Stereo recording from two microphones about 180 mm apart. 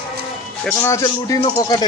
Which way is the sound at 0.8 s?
15° left (ahead or behind).